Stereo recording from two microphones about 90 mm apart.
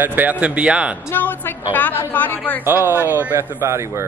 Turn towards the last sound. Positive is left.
turn(degrees=-30)  # may be behind; listen again after turning